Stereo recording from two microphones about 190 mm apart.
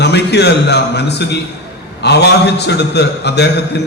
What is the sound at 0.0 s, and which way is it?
A man's voice, 60° left (ahead or behind).